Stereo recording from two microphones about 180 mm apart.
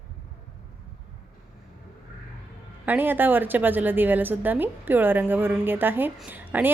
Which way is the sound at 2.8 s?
10° right (ahead or behind).